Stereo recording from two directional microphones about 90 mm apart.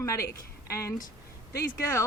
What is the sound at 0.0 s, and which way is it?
A woman's voice, 35° left (ahead or behind).